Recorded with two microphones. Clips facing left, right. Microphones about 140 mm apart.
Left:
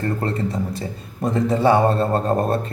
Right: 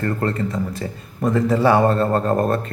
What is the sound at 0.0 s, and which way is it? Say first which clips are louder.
A man's voice: right 1 dB; 25° left (ahead or behind).